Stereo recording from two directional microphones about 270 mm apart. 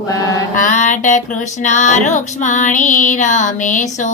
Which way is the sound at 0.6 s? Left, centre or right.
Left.